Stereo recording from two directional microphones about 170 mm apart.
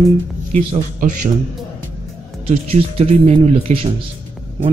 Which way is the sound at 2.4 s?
40° right (ahead or behind).